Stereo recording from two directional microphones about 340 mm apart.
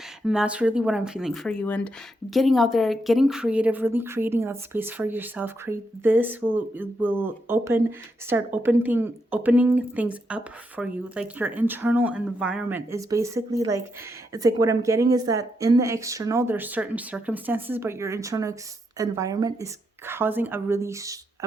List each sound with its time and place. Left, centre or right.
0.3 s speech: centre